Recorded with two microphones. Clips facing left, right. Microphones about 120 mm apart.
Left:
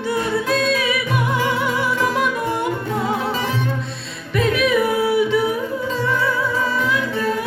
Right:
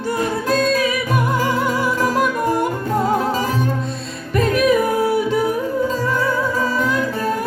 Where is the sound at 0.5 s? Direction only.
40° right (ahead or behind).